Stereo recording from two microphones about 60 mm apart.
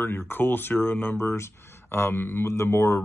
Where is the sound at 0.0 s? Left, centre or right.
Left.